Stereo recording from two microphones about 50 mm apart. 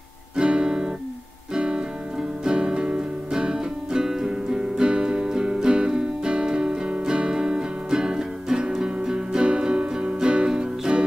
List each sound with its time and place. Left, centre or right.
0.4 s guitar: centre
1.5 s music: centre